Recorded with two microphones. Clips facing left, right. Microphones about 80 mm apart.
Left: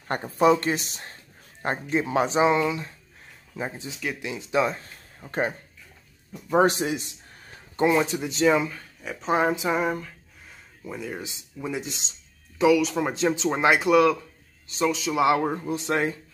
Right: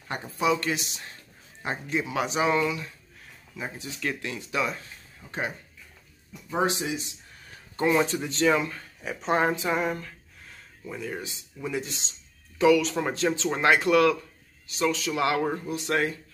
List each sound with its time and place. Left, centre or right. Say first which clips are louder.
0.1 s speech: left 6 dB; left
4.0 s speech: even; centre
5.2 s speech: left 4 dB; left
6.5 s speech: left 6 dB; left
7.8 s speech: left 2 dB; centre
8.6 s speech: even; centre
12.6 s speech: left 1 dB; centre
13.1 s speech: left 2 dB; centre
15.6 s speech: left 2 dB; left